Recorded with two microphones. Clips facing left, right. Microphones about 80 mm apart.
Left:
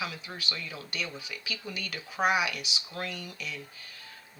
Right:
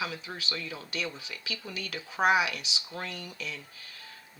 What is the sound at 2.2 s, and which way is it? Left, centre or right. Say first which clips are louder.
Speech: right 2 dB; centre.